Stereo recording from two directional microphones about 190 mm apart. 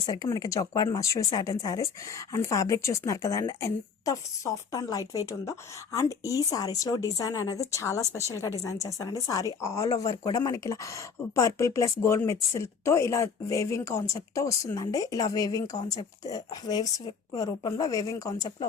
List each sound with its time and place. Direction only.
0.0 s speech: 20° left (ahead or behind)